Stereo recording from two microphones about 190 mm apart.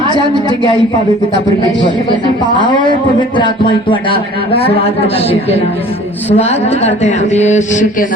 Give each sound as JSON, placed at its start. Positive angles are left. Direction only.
{"t": 2.4, "sound": "a man's voice", "side_deg": 25}